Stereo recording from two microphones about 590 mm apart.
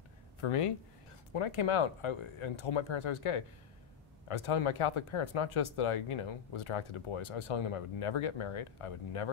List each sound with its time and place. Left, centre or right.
0.4 s speech: left